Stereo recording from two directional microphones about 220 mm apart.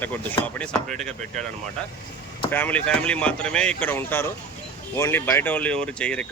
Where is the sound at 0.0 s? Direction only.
10° left (ahead or behind).